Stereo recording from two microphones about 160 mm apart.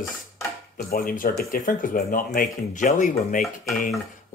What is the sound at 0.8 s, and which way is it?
Speech, 65° left (ahead or behind).